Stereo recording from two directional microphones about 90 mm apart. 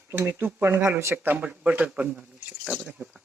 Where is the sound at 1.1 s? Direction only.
20° right (ahead or behind).